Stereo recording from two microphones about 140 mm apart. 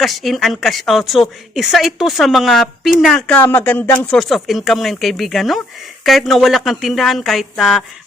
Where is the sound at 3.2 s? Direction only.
10° left (ahead or behind).